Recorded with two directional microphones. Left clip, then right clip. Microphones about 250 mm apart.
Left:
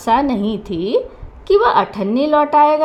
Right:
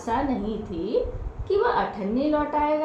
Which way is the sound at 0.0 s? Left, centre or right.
Left.